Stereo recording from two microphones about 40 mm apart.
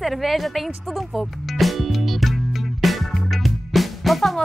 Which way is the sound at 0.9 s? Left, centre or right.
Centre.